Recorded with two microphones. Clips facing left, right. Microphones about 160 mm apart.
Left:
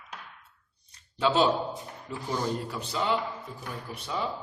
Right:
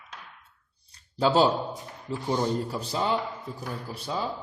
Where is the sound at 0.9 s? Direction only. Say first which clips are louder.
Right 3 dB; 35° right (ahead or behind).